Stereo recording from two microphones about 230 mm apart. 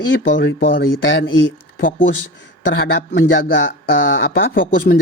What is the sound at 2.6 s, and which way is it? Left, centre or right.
Speech, left.